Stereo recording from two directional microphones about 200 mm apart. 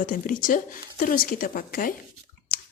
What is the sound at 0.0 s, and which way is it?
A woman's voice, 40° left (ahead or behind).